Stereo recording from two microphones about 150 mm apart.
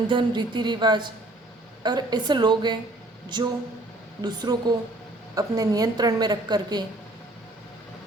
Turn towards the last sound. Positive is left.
turn(degrees=-30)  # may be behind; listen again after turning